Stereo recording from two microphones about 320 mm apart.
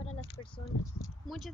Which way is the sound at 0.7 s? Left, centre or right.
Left.